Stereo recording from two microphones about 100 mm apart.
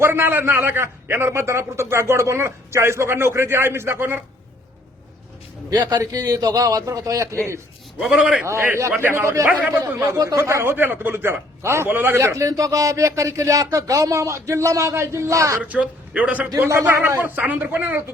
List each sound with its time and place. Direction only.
0.0 s a man's voice: 20° right (ahead or behind)
5.7 s speech: 40° right (ahead or behind)
7.9 s speech: 5° right (ahead or behind)
8.4 s a man's voice: 25° right (ahead or behind)
9.5 s speech: 15° right (ahead or behind)
10.0 s speech: 35° right (ahead or behind)
15.6 s speech: 15° right (ahead or behind)